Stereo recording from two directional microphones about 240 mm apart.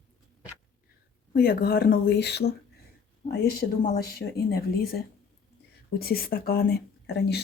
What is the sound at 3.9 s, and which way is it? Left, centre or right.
Speech, left.